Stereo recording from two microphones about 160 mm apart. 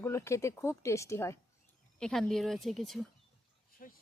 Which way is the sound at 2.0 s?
5° left (ahead or behind).